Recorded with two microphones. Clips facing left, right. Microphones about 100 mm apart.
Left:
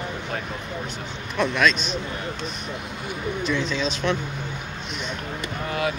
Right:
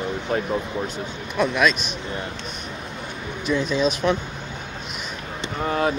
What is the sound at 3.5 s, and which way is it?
Speech, 10° right (ahead or behind).